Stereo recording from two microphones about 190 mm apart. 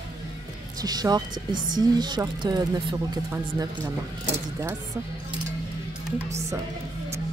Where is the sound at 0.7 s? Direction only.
20° right (ahead or behind).